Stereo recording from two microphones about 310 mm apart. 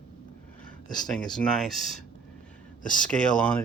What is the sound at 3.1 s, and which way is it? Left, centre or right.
Speech, centre.